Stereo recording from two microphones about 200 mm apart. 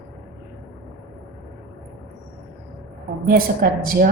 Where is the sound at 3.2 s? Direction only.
50° right (ahead or behind).